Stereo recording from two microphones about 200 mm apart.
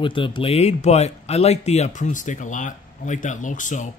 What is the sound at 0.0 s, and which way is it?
A man's voice, 25° left (ahead or behind).